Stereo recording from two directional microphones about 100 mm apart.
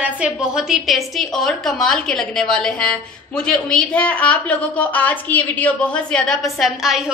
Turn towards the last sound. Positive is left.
turn(degrees=0)  # may be behind; listen again after turning